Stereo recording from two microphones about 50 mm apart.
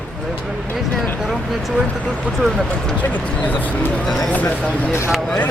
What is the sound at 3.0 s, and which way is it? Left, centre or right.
Speech, left.